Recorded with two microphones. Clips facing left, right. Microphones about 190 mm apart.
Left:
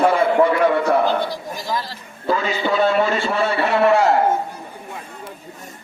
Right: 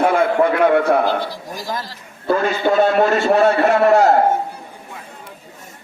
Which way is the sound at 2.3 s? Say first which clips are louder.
Right 4 dB; 50° right (ahead or behind).